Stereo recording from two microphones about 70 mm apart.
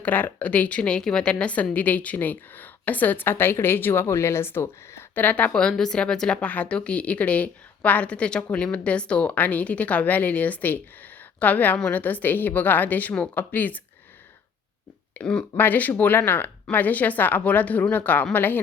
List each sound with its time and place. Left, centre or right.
0.0 s speech: left
5.2 s a woman's voice: left
15.2 s a woman's voice: centre
15.5 s speech: left